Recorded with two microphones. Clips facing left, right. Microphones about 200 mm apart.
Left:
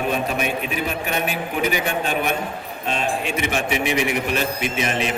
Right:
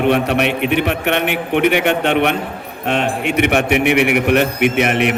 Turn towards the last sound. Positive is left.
turn(degrees=-65)  # may be behind; listen again after turning